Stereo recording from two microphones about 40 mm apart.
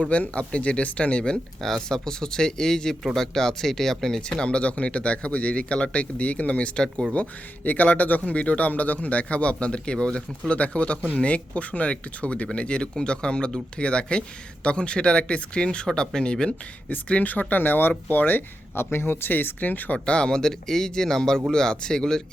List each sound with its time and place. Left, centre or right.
0.1 s speech: left
1.6 s speech: centre
4.2 s speech: left
17.1 s speech: left
17.5 s speech: left
19.5 s speech: left
20.1 s speech: left